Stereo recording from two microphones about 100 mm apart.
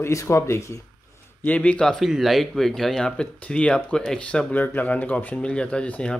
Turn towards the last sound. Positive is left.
turn(degrees=10)  # may be behind; listen again after turning